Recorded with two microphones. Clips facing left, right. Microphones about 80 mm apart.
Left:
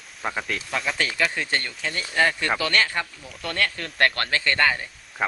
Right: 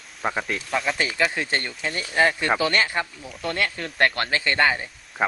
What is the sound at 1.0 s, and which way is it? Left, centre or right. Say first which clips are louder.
Speech: right 1 dB; centre.